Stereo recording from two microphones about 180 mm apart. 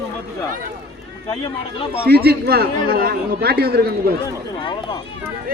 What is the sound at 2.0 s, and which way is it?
Speech, 60° right (ahead or behind).